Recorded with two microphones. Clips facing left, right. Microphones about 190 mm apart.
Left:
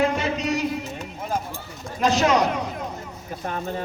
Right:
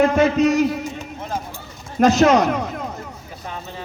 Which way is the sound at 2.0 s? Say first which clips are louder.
Right 6 dB; 45° right (ahead or behind).